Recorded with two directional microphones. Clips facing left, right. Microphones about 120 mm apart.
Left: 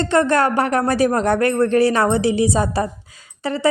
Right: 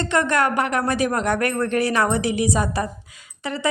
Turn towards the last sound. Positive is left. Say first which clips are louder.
# left 5 dB
turn(degrees=35)  # may be behind; listen again after turning